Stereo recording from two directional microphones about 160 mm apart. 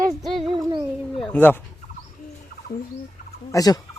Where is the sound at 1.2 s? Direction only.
10° left (ahead or behind).